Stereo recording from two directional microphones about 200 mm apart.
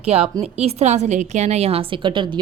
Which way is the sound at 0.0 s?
30° right (ahead or behind).